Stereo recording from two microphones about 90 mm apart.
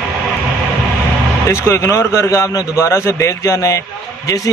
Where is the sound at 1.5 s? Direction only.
30° left (ahead or behind).